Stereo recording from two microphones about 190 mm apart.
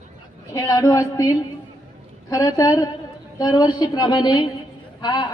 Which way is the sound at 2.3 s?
20° left (ahead or behind).